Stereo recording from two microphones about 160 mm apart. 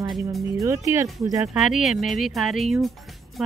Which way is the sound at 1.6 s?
5° right (ahead or behind).